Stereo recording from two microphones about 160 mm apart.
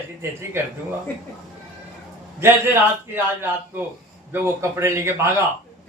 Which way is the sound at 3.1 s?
10° right (ahead or behind).